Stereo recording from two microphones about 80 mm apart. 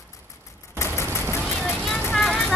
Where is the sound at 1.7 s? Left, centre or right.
Centre.